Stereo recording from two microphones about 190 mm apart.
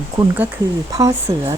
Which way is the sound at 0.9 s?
15° right (ahead or behind).